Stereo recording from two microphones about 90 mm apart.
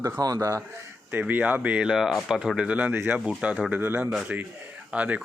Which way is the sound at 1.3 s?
20° right (ahead or behind).